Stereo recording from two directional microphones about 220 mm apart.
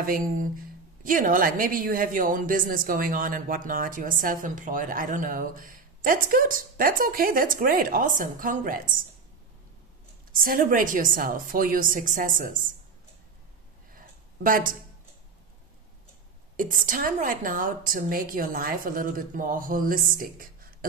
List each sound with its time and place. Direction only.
0.0 s a woman's voice: 40° right (ahead or behind)
10.3 s a woman's voice: 40° right (ahead or behind)
13.9 s a sound: 40° right (ahead or behind)
16.5 s a woman's voice: 35° right (ahead or behind)